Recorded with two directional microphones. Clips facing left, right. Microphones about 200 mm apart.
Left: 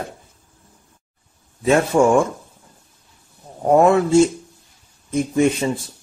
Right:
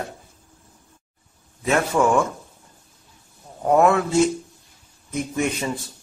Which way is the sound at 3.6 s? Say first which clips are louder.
Left 3 dB; 30° left (ahead or behind).